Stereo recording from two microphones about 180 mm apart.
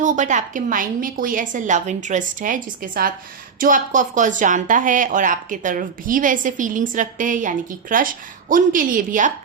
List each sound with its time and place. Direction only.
0.0 s speech: 45° right (ahead or behind)